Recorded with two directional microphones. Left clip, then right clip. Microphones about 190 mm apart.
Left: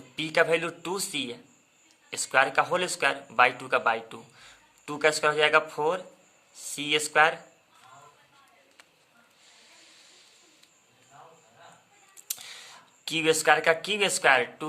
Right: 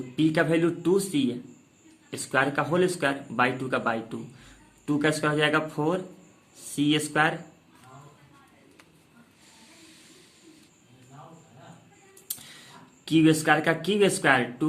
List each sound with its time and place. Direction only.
0.2 s speech: 30° left (ahead or behind)
12.3 s a sound: 30° left (ahead or behind)
13.1 s speech: 30° left (ahead or behind)